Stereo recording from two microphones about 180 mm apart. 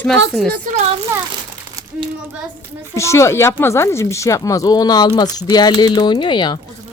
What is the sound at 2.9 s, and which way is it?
Speech, 15° left (ahead or behind).